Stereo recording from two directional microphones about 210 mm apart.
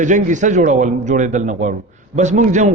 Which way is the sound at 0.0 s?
35° right (ahead or behind).